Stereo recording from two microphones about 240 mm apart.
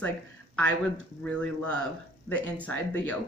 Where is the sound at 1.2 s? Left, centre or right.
Centre.